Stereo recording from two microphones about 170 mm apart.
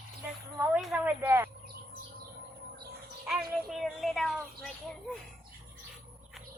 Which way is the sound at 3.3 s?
Centre (ahead or behind).